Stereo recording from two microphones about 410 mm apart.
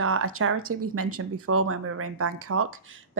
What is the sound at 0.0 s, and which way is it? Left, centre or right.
Speech, right.